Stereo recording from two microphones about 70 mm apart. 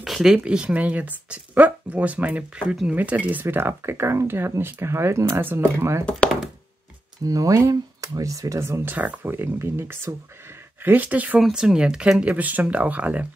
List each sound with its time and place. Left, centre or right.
0.0 s a sound: centre
0.4 s speech: centre
3.4 s speech: right
6.0 s speech: centre
7.2 s speech: right
8.5 s speech: right
8.9 s speech: right
10.8 s speech: right
11.5 s speech: centre